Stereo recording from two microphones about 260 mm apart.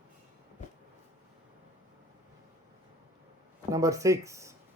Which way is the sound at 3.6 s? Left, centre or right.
Centre.